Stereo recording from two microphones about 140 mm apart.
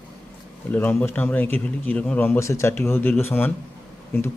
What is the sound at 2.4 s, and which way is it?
A man's voice, 20° left (ahead or behind).